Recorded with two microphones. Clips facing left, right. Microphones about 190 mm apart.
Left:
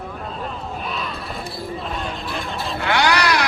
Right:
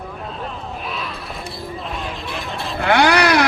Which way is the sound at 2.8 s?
55° right (ahead or behind).